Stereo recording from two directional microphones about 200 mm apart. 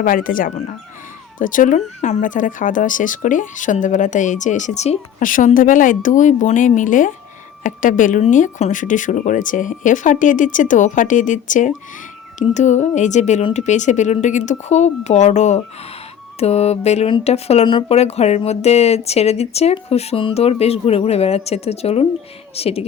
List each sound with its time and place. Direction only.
0.0 s speech: 45° left (ahead or behind)